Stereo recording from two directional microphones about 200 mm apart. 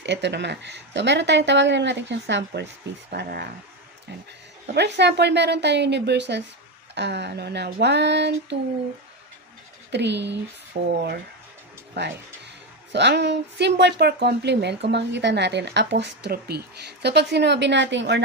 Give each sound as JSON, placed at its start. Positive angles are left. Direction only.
{"t": 0.0, "sound": "speech", "side_deg": -60}
{"t": 3.1, "sound": "speech", "side_deg": -50}
{"t": 4.7, "sound": "speech", "side_deg": -60}
{"t": 9.8, "sound": "speech", "side_deg": -60}
{"t": 10.8, "sound": "speech", "side_deg": -40}
{"t": 12.0, "sound": "speech", "side_deg": -60}